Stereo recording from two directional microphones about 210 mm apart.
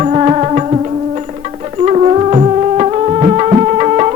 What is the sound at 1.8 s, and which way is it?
Music, 30° right (ahead or behind).